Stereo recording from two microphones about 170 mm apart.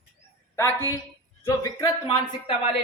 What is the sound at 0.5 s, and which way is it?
A woman's voice, 15° left (ahead or behind).